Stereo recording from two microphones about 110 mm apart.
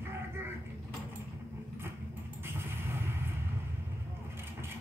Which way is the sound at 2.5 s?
20° right (ahead or behind).